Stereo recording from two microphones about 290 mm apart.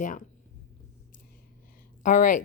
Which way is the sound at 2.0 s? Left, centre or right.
Left.